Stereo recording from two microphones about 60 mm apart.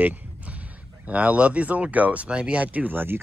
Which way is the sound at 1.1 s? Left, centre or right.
Right.